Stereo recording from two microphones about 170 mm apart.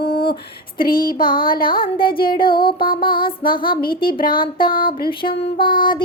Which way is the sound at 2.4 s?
30° left (ahead or behind).